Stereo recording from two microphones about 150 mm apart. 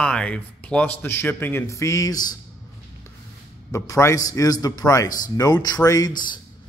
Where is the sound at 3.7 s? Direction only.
20° left (ahead or behind).